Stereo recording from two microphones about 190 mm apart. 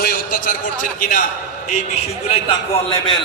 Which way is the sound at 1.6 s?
35° left (ahead or behind).